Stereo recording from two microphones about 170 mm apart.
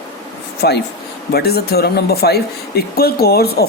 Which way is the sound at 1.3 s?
70° left (ahead or behind).